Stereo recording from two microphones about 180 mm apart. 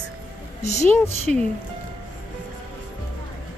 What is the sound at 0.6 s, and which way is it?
Speech, 40° left (ahead or behind).